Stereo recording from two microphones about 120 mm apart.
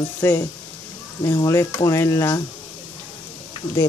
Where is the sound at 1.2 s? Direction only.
30° left (ahead or behind).